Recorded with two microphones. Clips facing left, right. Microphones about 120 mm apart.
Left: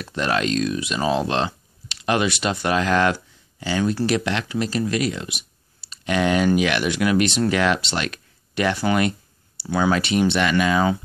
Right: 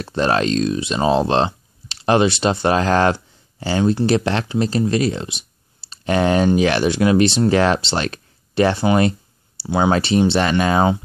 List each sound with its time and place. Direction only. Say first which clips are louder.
0.0 s speech: right 5 dB; 35° right (ahead or behind)